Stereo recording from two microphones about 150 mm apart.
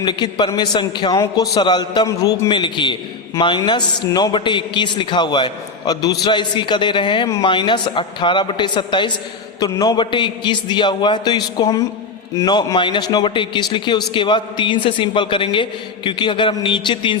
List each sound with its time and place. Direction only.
0.0 s a man's voice: 30° left (ahead or behind)